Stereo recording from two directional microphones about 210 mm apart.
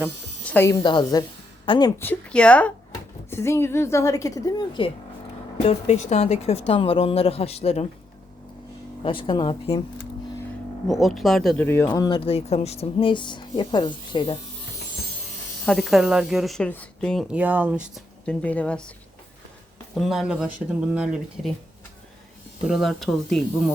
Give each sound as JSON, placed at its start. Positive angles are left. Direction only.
{"t": 0.4, "sound": "a woman's voice", "side_deg": 10}
{"t": 2.0, "sound": "a woman's voice", "side_deg": 5}
{"t": 5.6, "sound": "speech", "side_deg": 30}
{"t": 9.0, "sound": "speech", "side_deg": 25}
{"t": 10.8, "sound": "speech", "side_deg": 0}
{"t": 11.9, "sound": "speech", "side_deg": 20}
{"t": 15.6, "sound": "speech", "side_deg": 0}
{"t": 20.0, "sound": "speech", "side_deg": 0}
{"t": 22.6, "sound": "speech", "side_deg": 0}